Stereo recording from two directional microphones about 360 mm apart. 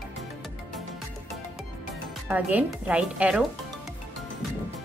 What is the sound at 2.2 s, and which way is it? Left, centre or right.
Speech, centre.